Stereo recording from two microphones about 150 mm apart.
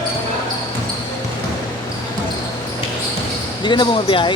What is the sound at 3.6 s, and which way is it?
Speech, 30° left (ahead or behind).